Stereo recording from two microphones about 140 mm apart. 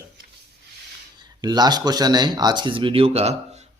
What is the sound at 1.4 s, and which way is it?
Speech, 30° right (ahead or behind).